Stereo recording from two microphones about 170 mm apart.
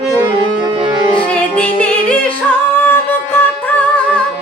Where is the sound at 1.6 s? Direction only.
5° left (ahead or behind).